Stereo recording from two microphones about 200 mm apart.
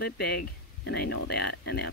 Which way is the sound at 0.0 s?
50° left (ahead or behind).